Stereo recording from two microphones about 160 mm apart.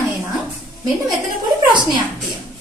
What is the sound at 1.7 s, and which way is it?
Speech, 30° right (ahead or behind).